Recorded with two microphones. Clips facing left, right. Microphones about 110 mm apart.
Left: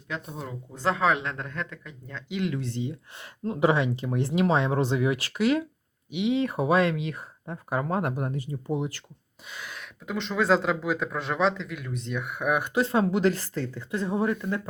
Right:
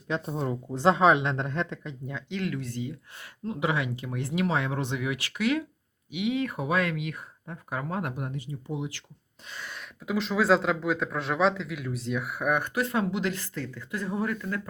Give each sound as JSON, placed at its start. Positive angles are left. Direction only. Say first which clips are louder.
{"t": 0.1, "sound": "speech", "louder": "right 6 dB", "side_deg": -30}
{"t": 2.3, "sound": "speech", "louder": "left 3 dB", "side_deg": 20}
{"t": 3.4, "sound": "speech", "louder": "left 5 dB", "side_deg": 40}
{"t": 9.5, "sound": "speech", "louder": "even", "side_deg": 5}
{"t": 12.7, "sound": "speech", "louder": "left 4 dB", "side_deg": 30}
{"t": 13.1, "sound": "speech", "louder": "left 6 dB", "side_deg": 40}